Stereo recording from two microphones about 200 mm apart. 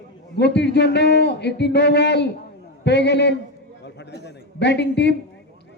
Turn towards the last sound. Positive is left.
turn(degrees=60)  # may be behind; listen again after turning